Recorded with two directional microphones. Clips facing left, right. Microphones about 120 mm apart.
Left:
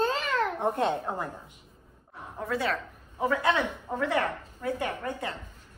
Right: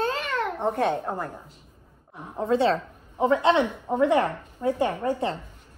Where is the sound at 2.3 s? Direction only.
25° right (ahead or behind).